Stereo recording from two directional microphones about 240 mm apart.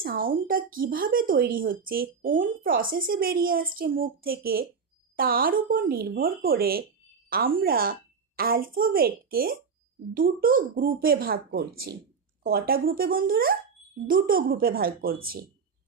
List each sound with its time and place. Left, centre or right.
0.0 s speech: right